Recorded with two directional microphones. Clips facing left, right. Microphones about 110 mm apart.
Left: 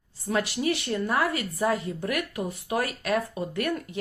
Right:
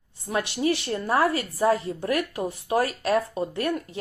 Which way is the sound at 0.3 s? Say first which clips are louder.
Right 1 dB; 25° right (ahead or behind).